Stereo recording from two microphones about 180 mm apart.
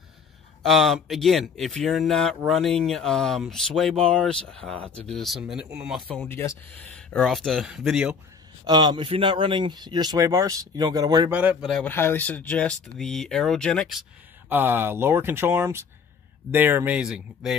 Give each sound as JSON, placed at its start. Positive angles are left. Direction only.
{"t": 0.6, "sound": "speech", "side_deg": 0}
{"t": 6.0, "sound": "speech", "side_deg": 10}
{"t": 8.6, "sound": "speech", "side_deg": -25}
{"t": 11.2, "sound": "speech", "side_deg": -10}
{"t": 11.9, "sound": "speech", "side_deg": 10}
{"t": 14.5, "sound": "speech", "side_deg": -10}